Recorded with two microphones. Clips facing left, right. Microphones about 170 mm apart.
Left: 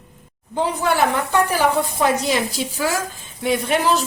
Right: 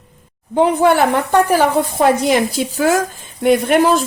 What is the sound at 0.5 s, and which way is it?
Speech, 60° right (ahead or behind).